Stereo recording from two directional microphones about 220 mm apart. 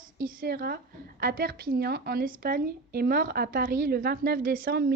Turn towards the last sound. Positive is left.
turn(degrees=-45)  # may be behind; listen again after turning